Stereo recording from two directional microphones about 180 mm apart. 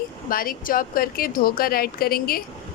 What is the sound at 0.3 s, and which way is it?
Speech, 55° left (ahead or behind).